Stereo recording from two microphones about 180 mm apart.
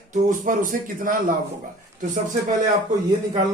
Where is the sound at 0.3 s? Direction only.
50° right (ahead or behind).